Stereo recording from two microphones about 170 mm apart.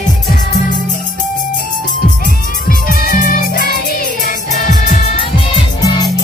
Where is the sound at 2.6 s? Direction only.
55° left (ahead or behind).